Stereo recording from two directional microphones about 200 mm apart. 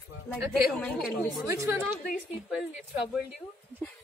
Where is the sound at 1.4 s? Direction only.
15° right (ahead or behind).